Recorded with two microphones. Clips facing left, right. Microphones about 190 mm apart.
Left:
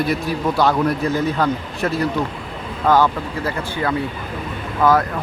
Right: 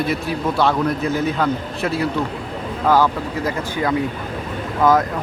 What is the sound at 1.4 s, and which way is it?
Speech, 5° right (ahead or behind).